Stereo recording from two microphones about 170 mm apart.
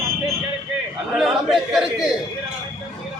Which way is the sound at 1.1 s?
Centre (ahead or behind).